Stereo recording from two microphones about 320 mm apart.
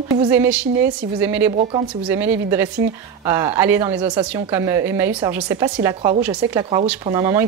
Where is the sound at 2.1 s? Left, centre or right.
Centre.